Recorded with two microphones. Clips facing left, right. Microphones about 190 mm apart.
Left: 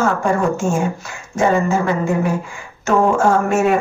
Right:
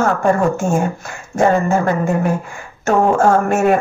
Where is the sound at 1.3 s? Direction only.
55° right (ahead or behind).